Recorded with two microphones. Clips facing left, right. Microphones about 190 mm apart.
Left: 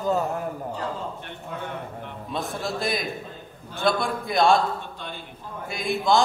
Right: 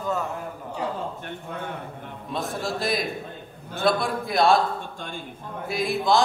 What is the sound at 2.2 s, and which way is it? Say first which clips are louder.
A man's voice: right 1 dB; centre (ahead or behind).